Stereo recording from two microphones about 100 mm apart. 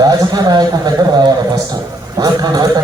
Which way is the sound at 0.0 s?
40° right (ahead or behind).